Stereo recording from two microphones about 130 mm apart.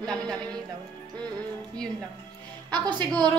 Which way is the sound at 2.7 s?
35° right (ahead or behind).